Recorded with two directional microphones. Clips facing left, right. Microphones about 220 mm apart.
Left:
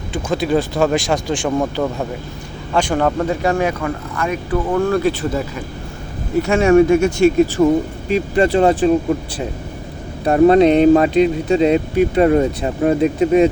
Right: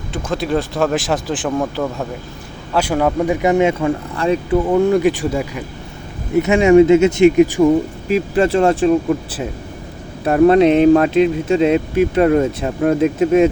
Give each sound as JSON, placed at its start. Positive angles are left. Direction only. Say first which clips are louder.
{"t": 0.1, "sound": "speech", "louder": "left 2 dB", "side_deg": 0}
{"t": 3.4, "sound": "speech", "louder": "right 6 dB", "side_deg": -20}
{"t": 4.5, "sound": "speech", "louder": "right 2 dB", "side_deg": -20}
{"t": 8.0, "sound": "speech", "louder": "left 1 dB", "side_deg": 0}
{"t": 10.2, "sound": "speech", "louder": "even", "side_deg": 0}